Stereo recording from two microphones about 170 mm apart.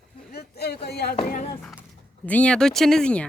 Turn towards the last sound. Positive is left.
turn(degrees=5)  # may be behind; listen again after turning